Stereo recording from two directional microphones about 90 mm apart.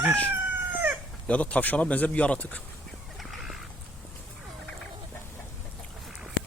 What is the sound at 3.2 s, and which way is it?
Fowl, 5° right (ahead or behind).